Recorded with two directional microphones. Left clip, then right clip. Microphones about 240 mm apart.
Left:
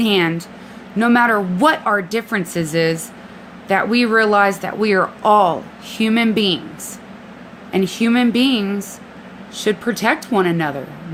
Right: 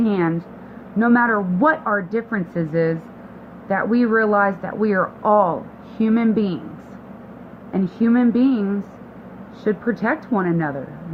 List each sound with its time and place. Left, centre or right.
0.0 s speech: left
7.7 s speech: left